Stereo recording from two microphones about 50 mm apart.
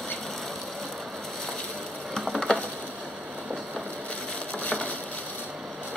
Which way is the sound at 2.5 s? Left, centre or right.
Left.